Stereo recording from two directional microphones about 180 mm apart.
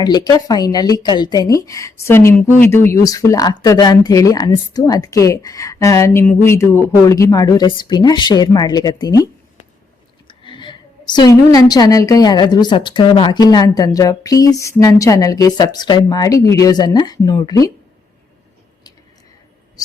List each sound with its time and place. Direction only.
0.0 s a woman's voice: 20° left (ahead or behind)